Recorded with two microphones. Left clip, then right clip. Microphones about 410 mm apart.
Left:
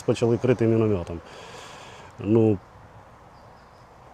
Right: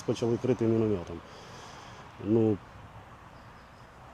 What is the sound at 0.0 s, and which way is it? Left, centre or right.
Speech, left.